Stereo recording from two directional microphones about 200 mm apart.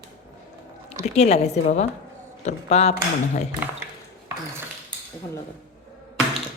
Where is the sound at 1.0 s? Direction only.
35° left (ahead or behind).